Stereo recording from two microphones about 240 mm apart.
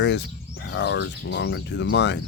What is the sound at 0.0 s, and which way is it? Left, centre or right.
Speech, left.